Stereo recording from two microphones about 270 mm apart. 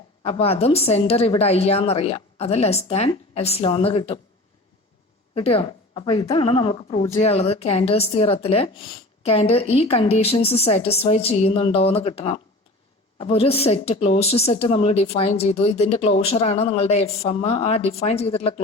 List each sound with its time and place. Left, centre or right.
0.3 s a woman's voice: left
5.3 s a woman's voice: left